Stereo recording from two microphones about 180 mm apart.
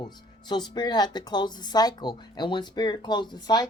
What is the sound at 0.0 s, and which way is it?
Speech, 25° left (ahead or behind).